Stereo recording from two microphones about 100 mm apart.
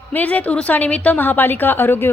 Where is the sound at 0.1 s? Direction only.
15° left (ahead or behind).